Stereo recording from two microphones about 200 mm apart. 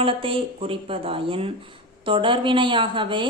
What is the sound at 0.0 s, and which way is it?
A woman's voice, 25° right (ahead or behind).